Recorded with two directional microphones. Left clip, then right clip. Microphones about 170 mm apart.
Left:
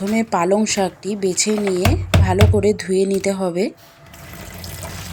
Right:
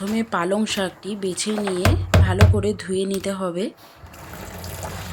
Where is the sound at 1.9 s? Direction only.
20° left (ahead or behind).